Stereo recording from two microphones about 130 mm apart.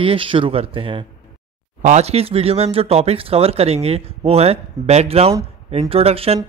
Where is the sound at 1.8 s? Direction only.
60° right (ahead or behind).